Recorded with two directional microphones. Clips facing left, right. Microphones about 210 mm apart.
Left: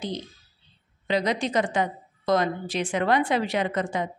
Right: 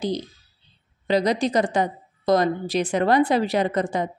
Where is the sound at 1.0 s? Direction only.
35° right (ahead or behind).